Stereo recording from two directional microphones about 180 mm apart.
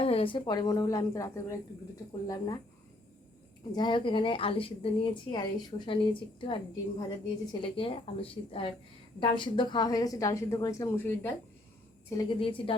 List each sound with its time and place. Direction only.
0.0 s a woman's voice: 30° left (ahead or behind)
3.7 s a woman's voice: 25° left (ahead or behind)
7.6 s a woman's voice: 30° left (ahead or behind); by 11.3 s 10° left (ahead or behind)
12.1 s a woman's voice: 30° left (ahead or behind)